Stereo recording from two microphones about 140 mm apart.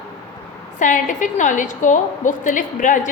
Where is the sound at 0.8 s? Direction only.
70° left (ahead or behind).